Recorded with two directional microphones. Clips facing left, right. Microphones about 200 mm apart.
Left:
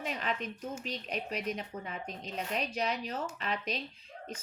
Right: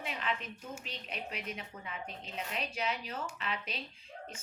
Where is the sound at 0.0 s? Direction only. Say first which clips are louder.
Left 2 dB; 40° left (ahead or behind).